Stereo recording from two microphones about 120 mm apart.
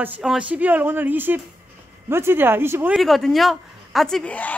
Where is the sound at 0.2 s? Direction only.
5° right (ahead or behind).